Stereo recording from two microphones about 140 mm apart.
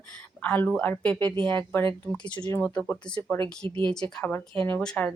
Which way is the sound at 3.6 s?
35° right (ahead or behind).